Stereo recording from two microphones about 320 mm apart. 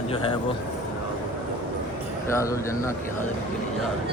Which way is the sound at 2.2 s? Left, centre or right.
Centre.